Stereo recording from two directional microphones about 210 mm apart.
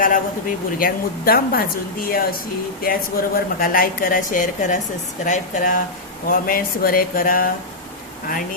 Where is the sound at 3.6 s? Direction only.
45° left (ahead or behind).